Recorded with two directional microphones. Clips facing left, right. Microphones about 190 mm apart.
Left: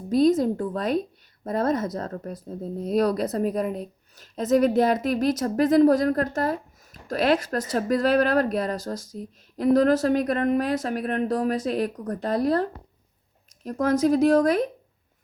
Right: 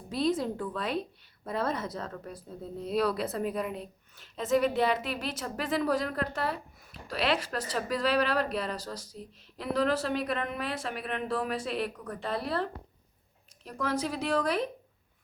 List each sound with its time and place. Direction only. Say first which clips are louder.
0.1 s speech: left 9 dB; 45° left (ahead or behind)
13.7 s speech: left 11 dB; 45° left (ahead or behind)